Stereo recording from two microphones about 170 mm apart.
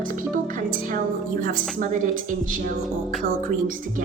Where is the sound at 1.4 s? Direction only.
50° right (ahead or behind).